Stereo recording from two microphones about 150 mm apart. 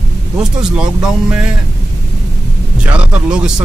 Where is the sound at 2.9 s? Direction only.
5° right (ahead or behind).